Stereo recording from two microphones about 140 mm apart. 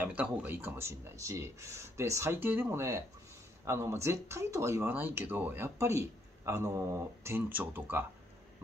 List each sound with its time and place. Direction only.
0.0 s speech: 10° right (ahead or behind)